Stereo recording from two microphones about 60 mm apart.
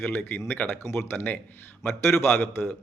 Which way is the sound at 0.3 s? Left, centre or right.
Left.